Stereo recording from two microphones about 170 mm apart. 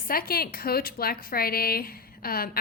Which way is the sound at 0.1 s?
60° left (ahead or behind).